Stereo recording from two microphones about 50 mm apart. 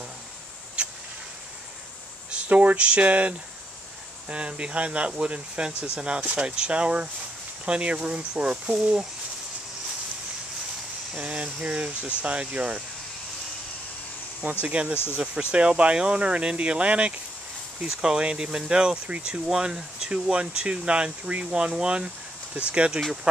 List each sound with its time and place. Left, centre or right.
0.8 s a sound: right
2.3 s speech: right
11.1 s speech: right
14.6 s speech: right